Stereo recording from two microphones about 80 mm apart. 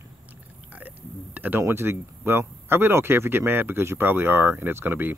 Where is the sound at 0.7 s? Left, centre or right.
Right.